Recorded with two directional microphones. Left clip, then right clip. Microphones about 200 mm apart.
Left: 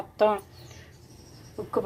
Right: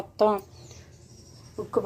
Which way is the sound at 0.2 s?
10° right (ahead or behind).